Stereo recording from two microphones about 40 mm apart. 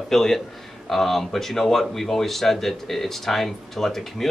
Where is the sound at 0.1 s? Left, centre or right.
Centre.